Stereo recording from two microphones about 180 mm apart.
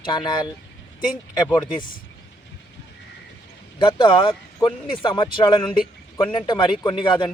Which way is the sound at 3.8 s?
25° left (ahead or behind).